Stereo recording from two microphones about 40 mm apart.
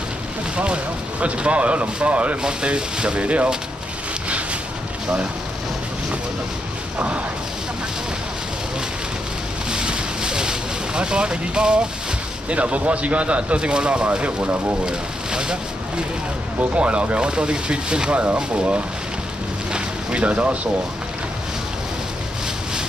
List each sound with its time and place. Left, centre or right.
1.2 s speech: right
7.0 s speech: right
9.7 s vehicle: right
12.4 s speech: right
14.9 s speech: centre
16.7 s speech: right
18.2 s speech: right
19.7 s a sound: right